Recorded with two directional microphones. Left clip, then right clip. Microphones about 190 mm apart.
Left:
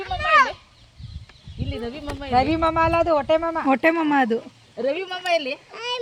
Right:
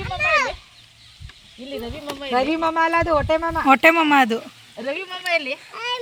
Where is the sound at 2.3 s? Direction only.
40° right (ahead or behind).